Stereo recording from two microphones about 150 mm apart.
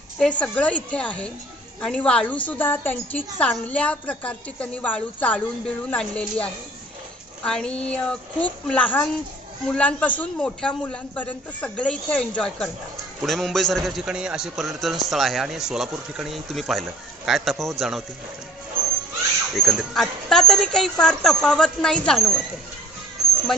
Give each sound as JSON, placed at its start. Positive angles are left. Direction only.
{"t": 0.2, "sound": "a woman's voice", "side_deg": 10}
{"t": 19.5, "sound": "a man's voice", "side_deg": 0}